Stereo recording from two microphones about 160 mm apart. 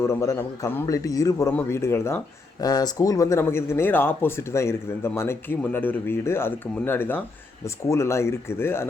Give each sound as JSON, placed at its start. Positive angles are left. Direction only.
{"t": 0.0, "sound": "a man's voice", "side_deg": 15}